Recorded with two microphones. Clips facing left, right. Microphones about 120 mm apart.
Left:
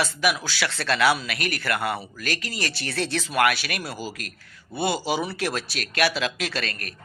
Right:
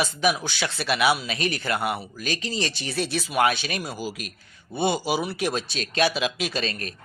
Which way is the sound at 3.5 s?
25° right (ahead or behind).